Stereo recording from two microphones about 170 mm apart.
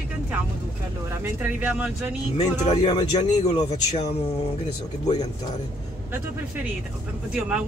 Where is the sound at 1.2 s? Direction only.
10° right (ahead or behind).